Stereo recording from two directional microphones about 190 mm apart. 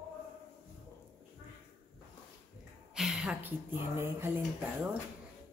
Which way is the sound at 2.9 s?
5° right (ahead or behind).